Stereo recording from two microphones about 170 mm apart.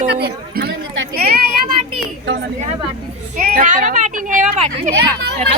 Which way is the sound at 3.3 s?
50° right (ahead or behind).